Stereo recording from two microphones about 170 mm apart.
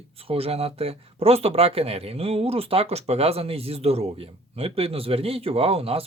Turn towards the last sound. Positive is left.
turn(degrees=-35)  # may be behind; listen again after turning